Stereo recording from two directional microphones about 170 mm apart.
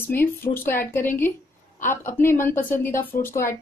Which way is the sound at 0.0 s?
10° left (ahead or behind).